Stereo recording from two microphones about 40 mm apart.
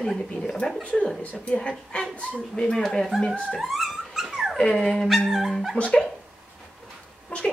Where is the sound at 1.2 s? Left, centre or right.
Left.